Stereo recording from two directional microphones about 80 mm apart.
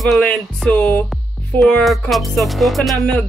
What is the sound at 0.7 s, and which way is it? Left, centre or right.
Speech, centre.